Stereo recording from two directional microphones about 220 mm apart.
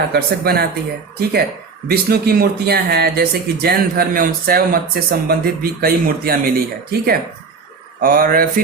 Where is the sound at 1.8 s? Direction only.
45° right (ahead or behind).